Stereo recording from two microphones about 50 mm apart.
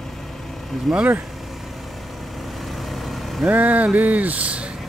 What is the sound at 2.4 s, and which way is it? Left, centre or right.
Vehicle, centre.